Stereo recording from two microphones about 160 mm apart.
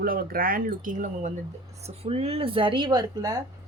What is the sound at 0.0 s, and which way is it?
Speech, 65° right (ahead or behind).